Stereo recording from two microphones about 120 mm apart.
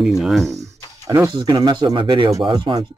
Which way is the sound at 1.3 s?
40° right (ahead or behind).